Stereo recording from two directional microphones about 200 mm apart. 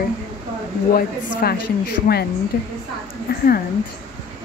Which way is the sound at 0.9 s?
50° left (ahead or behind).